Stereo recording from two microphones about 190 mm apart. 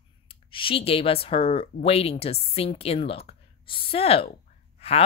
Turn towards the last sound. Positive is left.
turn(degrees=35)  # may be behind; listen again after turning